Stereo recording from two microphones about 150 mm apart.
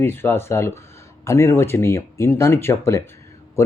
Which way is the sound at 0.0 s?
15° left (ahead or behind).